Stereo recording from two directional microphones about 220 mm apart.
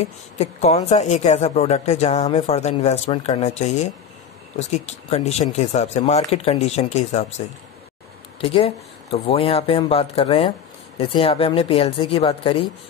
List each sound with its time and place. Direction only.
0.0 s speech: 30° left (ahead or behind)